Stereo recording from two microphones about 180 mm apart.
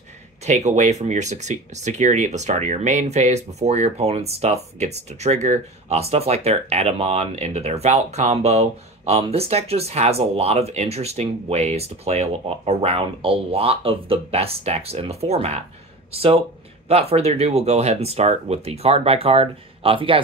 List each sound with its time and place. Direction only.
0.5 s speech: 40° right (ahead or behind)